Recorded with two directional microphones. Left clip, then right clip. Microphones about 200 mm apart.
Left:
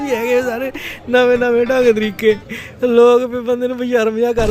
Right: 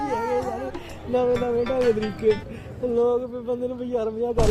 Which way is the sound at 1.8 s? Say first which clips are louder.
Left 8 dB; centre (ahead or behind).